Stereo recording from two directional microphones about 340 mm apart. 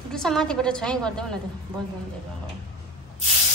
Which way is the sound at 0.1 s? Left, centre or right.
Centre.